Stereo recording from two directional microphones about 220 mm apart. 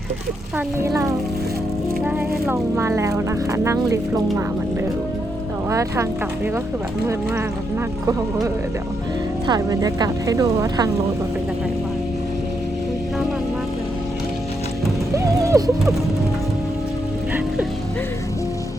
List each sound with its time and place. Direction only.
0.8 s speech: 15° right (ahead or behind)
5.7 s speech: 15° right (ahead or behind)
9.5 s speech: 15° right (ahead or behind)
15.1 s a sound: 15° right (ahead or behind)